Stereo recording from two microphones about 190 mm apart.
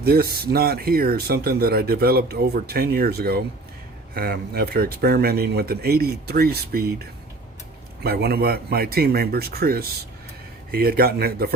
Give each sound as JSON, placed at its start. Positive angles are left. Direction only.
{"t": 0.0, "sound": "speech", "side_deg": -55}
{"t": 8.0, "sound": "speech", "side_deg": -55}